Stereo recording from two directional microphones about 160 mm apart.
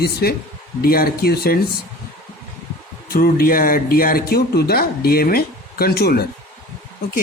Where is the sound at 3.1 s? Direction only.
65° left (ahead or behind).